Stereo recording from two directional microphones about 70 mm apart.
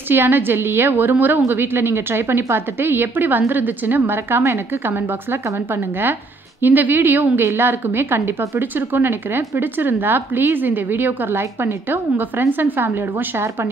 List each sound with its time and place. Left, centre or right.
0.1 s a woman's voice: right